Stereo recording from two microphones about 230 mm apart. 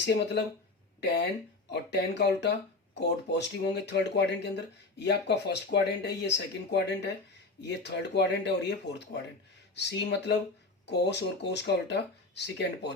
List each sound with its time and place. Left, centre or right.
0.0 s speech: left